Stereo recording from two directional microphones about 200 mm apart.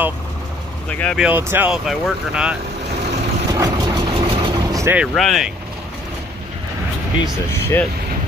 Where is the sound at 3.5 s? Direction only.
20° right (ahead or behind).